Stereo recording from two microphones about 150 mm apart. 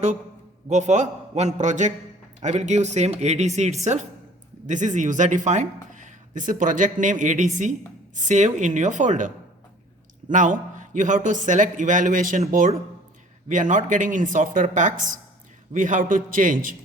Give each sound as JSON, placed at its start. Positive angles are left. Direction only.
{"t": 0.7, "sound": "speech", "side_deg": -50}